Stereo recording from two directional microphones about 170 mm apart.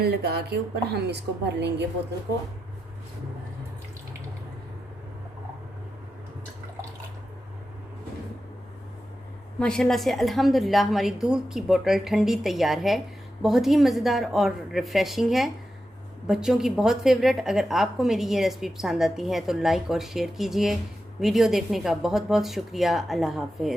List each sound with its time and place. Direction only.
0.0 s a woman's voice: 70° right (ahead or behind); by 1.9 s 90° right
9.6 s a woman's voice: 5° left (ahead or behind)